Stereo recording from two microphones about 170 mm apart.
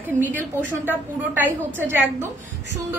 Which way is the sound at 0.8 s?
10° right (ahead or behind).